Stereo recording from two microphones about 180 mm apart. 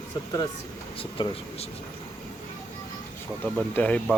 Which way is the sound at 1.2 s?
25° left (ahead or behind).